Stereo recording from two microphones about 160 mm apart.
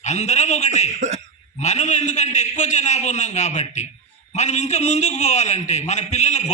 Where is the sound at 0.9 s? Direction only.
45° right (ahead or behind).